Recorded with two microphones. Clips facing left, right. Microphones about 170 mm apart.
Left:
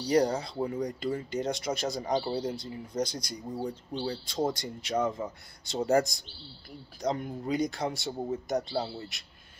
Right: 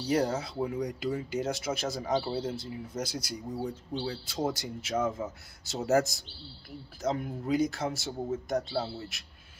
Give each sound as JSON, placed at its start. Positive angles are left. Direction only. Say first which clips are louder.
{"t": 0.0, "sound": "speech", "louder": "left 2 dB", "side_deg": -5}